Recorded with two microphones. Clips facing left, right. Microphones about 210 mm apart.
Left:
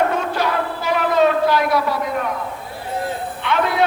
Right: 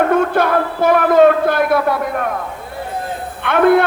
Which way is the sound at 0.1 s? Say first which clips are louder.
Right 7 dB; 55° right (ahead or behind).